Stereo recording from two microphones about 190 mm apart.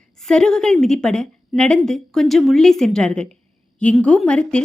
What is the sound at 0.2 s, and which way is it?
A woman's voice, 5° left (ahead or behind).